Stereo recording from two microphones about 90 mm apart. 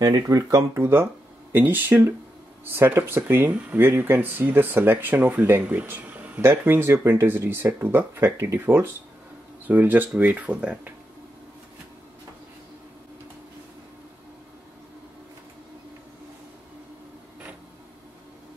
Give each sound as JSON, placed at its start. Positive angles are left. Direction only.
{"t": 0.3, "sound": "speech", "side_deg": -45}
{"t": 0.7, "sound": "speech", "side_deg": -30}